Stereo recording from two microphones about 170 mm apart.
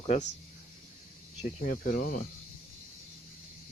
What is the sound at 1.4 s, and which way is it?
Speech, 50° left (ahead or behind).